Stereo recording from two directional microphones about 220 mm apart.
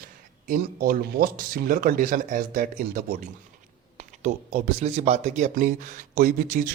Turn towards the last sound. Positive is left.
turn(degrees=-35)  # may be behind; listen again after turning